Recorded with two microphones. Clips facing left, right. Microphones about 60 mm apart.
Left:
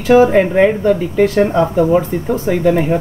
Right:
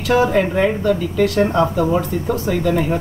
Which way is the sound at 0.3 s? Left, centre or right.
Left.